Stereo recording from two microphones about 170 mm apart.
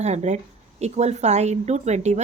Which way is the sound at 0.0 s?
40° right (ahead or behind).